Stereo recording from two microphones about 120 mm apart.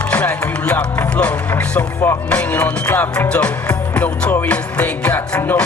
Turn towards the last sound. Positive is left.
turn(degrees=15)  # may be behind; listen again after turning